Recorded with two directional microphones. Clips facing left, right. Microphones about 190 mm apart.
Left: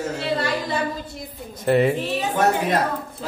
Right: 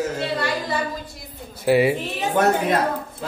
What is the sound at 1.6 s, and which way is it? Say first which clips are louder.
Speech: right 1 dB; 5° right (ahead or behind).